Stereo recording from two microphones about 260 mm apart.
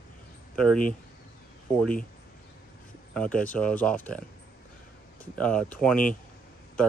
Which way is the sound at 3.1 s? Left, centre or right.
Centre.